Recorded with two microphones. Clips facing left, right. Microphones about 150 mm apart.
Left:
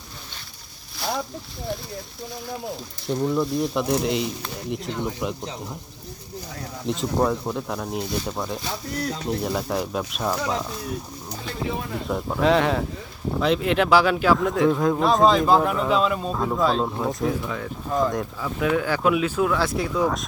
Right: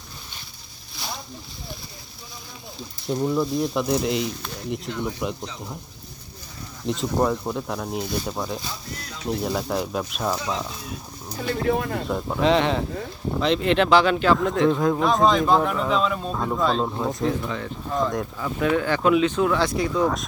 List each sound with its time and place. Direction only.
3.1 s speech: centre (ahead or behind)
6.8 s speech: centre (ahead or behind)
11.7 s speech: 60° right (ahead or behind)
12.0 s speech: centre (ahead or behind)